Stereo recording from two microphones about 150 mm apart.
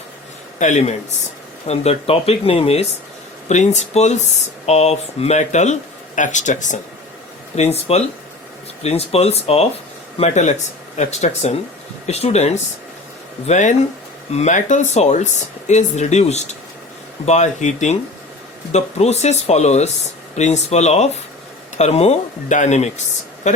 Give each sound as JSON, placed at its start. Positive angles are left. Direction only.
{"t": 0.6, "sound": "speech", "side_deg": 50}
{"t": 7.5, "sound": "speech", "side_deg": 45}